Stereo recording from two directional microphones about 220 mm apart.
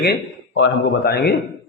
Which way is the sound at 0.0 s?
55° left (ahead or behind).